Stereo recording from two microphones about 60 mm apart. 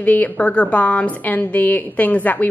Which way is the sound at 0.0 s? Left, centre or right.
Left.